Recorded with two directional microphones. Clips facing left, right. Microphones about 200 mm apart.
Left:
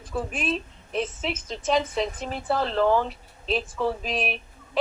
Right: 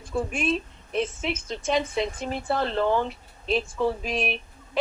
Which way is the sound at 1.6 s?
10° right (ahead or behind).